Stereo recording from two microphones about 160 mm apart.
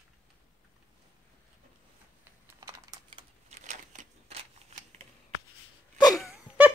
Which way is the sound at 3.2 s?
45° right (ahead or behind).